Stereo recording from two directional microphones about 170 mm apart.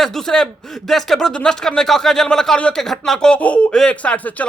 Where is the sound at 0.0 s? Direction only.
Centre (ahead or behind).